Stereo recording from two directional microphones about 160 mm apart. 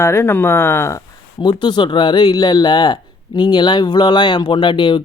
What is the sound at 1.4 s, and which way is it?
Speech, 25° left (ahead or behind).